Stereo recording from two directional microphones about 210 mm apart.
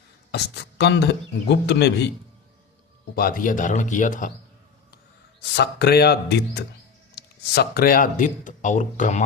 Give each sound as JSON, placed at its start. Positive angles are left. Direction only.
{"t": 0.3, "sound": "speech", "side_deg": 50}
{"t": 3.2, "sound": "speech", "side_deg": 45}
{"t": 5.4, "sound": "speech", "side_deg": 50}